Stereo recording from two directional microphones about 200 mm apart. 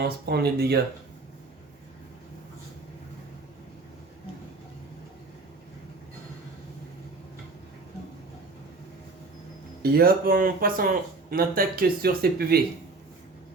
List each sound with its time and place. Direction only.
0.0 s speech: 55° right (ahead or behind)
9.8 s speech: 50° right (ahead or behind)